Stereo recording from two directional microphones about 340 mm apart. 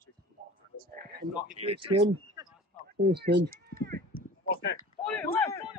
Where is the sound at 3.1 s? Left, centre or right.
Right.